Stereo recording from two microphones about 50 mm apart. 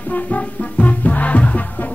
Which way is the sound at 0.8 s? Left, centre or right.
Left.